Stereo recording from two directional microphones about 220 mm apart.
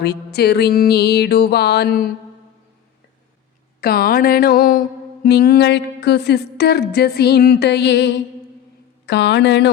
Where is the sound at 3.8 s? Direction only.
45° left (ahead or behind).